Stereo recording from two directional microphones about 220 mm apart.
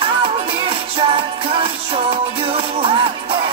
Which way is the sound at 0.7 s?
20° right (ahead or behind).